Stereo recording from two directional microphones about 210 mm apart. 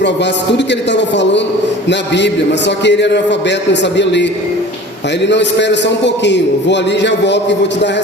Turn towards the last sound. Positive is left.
turn(degrees=55)  # may be behind; listen again after turning